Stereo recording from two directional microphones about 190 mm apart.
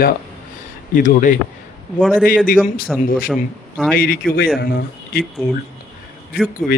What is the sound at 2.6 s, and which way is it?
A man's voice, 50° left (ahead or behind).